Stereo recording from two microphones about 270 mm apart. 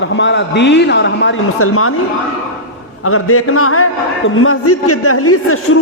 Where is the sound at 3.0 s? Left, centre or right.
Left.